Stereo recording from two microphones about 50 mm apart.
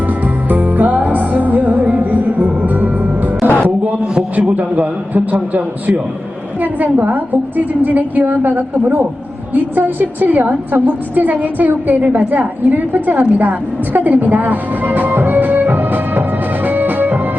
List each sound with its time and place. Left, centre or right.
0.4 s music: right
4.4 s a woman's voice: right
16.6 s music: right